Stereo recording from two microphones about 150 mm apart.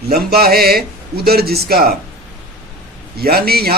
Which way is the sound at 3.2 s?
90° right.